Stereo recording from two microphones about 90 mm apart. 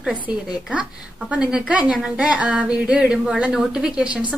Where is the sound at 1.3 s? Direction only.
10° right (ahead or behind).